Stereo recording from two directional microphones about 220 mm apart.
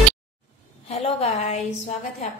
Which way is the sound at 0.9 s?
30° left (ahead or behind).